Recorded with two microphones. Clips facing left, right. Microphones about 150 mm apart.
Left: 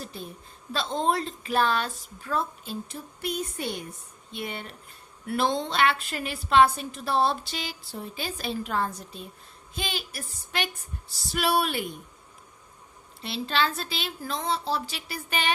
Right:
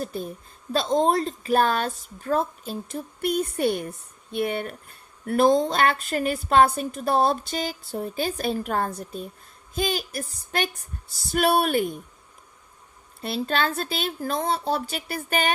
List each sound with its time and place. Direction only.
0.0 s a woman's voice: 50° right (ahead or behind)
13.2 s a woman's voice: 50° right (ahead or behind)